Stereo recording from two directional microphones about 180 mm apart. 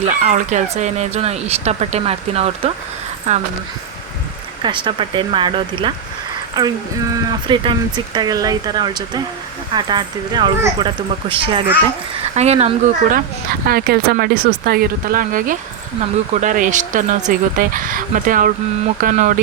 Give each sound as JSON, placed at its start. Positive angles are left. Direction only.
{"t": 0.0, "sound": "speech", "side_deg": -40}
{"t": 4.6, "sound": "speech", "side_deg": -25}
{"t": 12.3, "sound": "speech", "side_deg": -40}
{"t": 13.7, "sound": "speech", "side_deg": -55}